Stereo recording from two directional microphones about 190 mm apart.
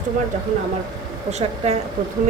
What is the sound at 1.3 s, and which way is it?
Speech, 35° right (ahead or behind).